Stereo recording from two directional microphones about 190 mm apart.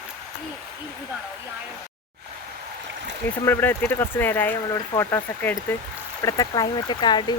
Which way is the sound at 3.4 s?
10° left (ahead or behind).